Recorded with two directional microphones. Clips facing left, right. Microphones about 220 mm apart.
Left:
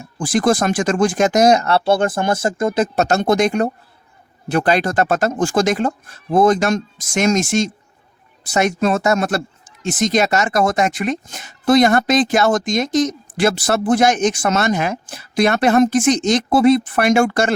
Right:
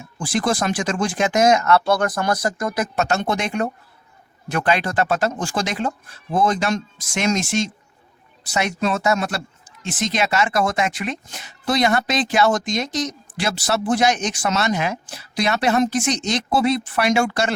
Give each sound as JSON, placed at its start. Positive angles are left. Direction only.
{"t": 0.2, "sound": "speech", "side_deg": 50}